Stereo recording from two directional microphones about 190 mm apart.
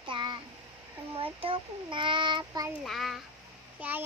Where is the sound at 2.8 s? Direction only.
Centre (ahead or behind).